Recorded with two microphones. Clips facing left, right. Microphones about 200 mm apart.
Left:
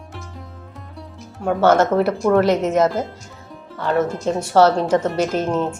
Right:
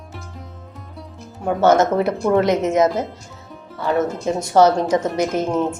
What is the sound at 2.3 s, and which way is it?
Speech, 15° right (ahead or behind).